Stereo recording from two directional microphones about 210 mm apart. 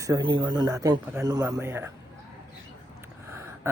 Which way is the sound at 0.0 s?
20° right (ahead or behind).